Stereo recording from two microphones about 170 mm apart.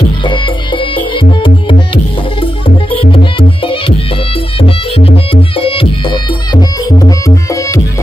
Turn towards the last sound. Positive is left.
turn(degrees=20)  # may be behind; listen again after turning